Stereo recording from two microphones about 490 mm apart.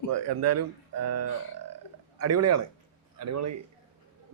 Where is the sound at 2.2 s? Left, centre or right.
Right.